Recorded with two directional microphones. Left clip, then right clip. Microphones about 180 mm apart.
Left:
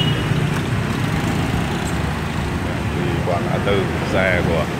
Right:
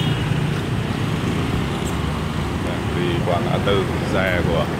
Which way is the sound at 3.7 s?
5° right (ahead or behind).